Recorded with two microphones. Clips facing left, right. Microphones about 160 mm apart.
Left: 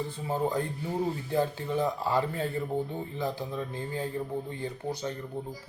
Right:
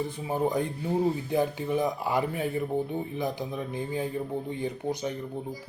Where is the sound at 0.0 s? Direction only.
15° right (ahead or behind).